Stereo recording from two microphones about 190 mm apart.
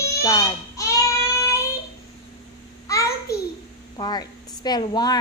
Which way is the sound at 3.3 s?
55° left (ahead or behind).